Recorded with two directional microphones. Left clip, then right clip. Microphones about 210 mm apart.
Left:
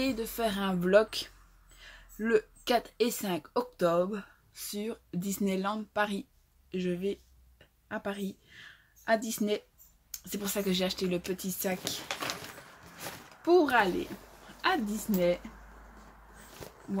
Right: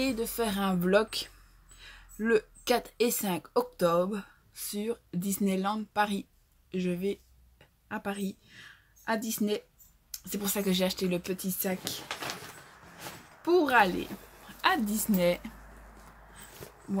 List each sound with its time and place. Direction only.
0.0 s speech: centre (ahead or behind)
6.7 s a sound: centre (ahead or behind)
10.1 s speech: centre (ahead or behind)
13.4 s a woman's voice: centre (ahead or behind); by 15.4 s 15° right (ahead or behind)